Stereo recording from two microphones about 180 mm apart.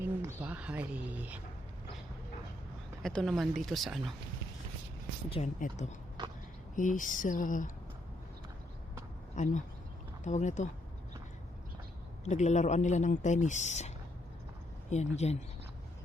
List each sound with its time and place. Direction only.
0.0 s a sound: 15° right (ahead or behind)
3.0 s speech: 5° left (ahead or behind)
5.3 s speech: 40° left (ahead or behind)
9.3 s speech: 40° left (ahead or behind)
12.2 s speech: 40° left (ahead or behind)